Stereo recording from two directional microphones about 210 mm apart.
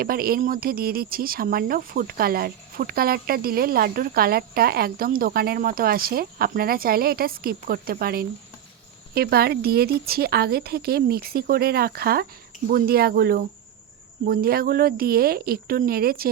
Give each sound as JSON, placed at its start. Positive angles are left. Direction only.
{"t": 0.0, "sound": "speech", "side_deg": -45}